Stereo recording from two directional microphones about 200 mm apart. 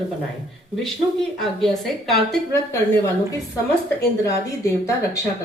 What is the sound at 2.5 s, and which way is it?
Speech, 15° left (ahead or behind).